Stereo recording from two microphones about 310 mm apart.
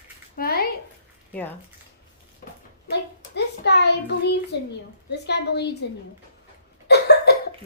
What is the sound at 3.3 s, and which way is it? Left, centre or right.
Hands, left.